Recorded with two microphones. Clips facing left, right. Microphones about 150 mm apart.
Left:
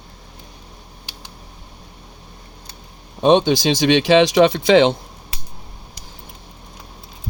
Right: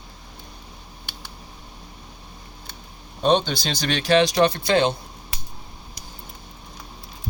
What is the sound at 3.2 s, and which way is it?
Speech, 90° left.